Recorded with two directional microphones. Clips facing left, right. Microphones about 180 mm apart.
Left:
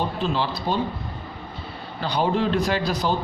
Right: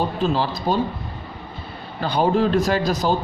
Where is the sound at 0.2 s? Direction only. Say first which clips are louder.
Right 3 dB; 45° right (ahead or behind).